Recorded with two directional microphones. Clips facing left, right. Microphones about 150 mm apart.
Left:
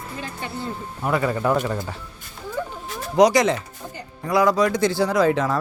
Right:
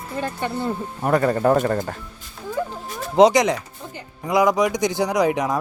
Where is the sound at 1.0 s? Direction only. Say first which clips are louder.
Right 3 dB; 45° right (ahead or behind).